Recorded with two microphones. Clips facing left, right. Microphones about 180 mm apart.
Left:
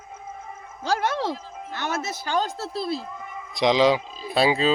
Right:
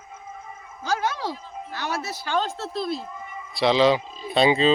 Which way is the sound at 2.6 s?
35° left (ahead or behind).